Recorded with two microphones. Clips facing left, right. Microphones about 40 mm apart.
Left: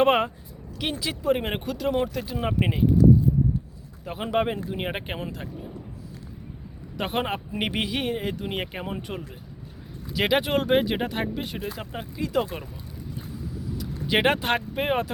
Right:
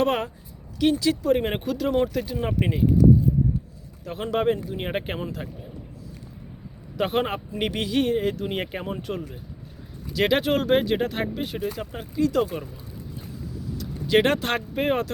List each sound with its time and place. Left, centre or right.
0.0 s a woman's voice: left
4.0 s speech: centre
6.9 s speech: centre
7.5 s speech: centre
13.7 s speech: centre